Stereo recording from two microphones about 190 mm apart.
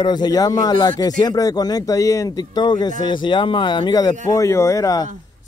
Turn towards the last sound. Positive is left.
turn(degrees=15)  # may be behind; listen again after turning